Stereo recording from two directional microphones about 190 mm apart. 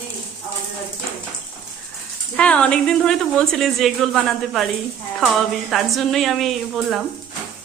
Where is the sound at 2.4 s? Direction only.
5° left (ahead or behind).